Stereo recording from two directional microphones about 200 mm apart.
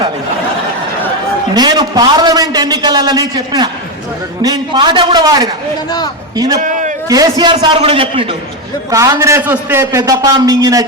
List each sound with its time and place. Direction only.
1.5 s a man's voice: 20° right (ahead or behind)
6.6 s a sound: 40° right (ahead or behind)
7.1 s a man's voice: 20° right (ahead or behind)
8.9 s a man's voice: 15° right (ahead or behind)